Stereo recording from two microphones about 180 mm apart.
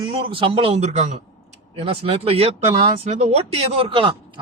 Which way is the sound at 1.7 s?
30° right (ahead or behind).